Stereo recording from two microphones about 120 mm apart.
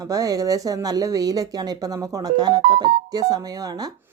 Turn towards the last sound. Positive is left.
turn(degrees=-30)  # may be behind; listen again after turning